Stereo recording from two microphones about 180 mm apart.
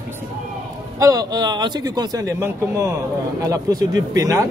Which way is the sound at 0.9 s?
20° right (ahead or behind).